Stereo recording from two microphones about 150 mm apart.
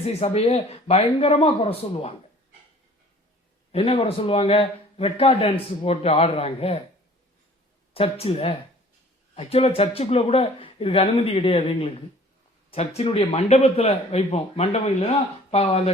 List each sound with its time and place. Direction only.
0.0 s a man's voice: 45° left (ahead or behind)
3.7 s a man's voice: 40° left (ahead or behind)
7.9 s a man's voice: 40° left (ahead or behind)